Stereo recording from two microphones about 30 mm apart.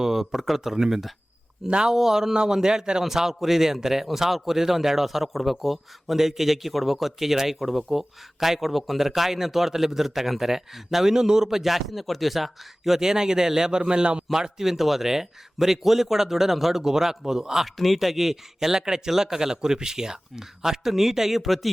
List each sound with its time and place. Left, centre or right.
0.0 s a man's voice: centre
1.6 s speech: right
1.9 s a man's voice: centre
3.0 s a man's voice: centre
13.0 s a man's voice: right
14.6 s a man's voice: centre
17.7 s a man's voice: centre